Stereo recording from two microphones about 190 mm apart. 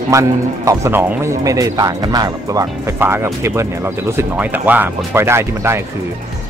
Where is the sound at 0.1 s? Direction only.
15° right (ahead or behind).